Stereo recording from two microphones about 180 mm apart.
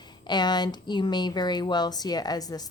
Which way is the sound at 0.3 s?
25° left (ahead or behind).